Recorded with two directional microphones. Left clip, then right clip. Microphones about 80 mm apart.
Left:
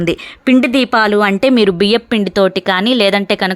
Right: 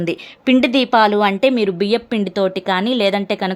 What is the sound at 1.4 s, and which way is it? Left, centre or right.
Speech, left.